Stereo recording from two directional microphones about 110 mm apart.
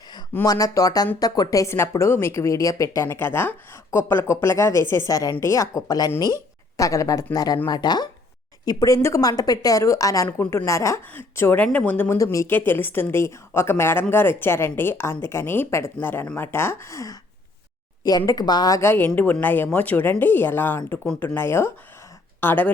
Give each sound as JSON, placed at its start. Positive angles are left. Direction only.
{"t": 0.4, "sound": "a woman's voice", "side_deg": 30}
{"t": 12.1, "sound": "a woman's voice", "side_deg": 30}
{"t": 12.5, "sound": "a woman's voice", "side_deg": 20}
{"t": 18.3, "sound": "speech", "side_deg": 35}
{"t": 18.8, "sound": "a woman's voice", "side_deg": 20}